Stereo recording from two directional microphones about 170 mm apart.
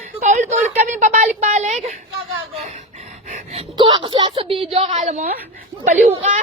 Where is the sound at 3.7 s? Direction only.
30° right (ahead or behind).